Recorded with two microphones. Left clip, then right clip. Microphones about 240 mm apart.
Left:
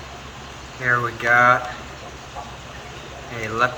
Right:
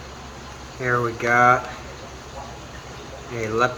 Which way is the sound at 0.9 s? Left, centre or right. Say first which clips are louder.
Left 2 dB; right.